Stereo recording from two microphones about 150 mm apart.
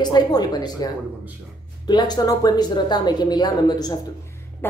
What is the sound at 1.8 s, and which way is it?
Speech, 30° left (ahead or behind).